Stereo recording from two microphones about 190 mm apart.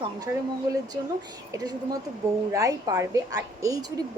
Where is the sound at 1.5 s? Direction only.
20° right (ahead or behind).